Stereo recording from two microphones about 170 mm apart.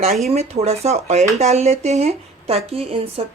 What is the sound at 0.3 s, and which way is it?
Speech, 40° right (ahead or behind).